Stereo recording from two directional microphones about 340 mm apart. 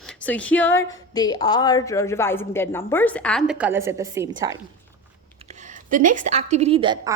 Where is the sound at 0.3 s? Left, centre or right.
Centre.